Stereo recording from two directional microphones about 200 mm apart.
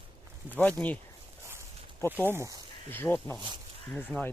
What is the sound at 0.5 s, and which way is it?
Speech, 5° left (ahead or behind).